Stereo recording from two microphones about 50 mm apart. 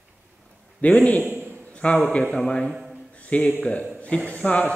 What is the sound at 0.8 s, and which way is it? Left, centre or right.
A man's voice, left.